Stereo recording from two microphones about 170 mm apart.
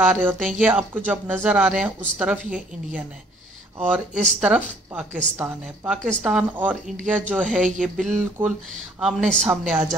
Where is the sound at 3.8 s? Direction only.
10° right (ahead or behind).